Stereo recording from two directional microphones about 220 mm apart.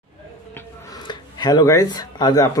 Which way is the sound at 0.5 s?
20° left (ahead or behind).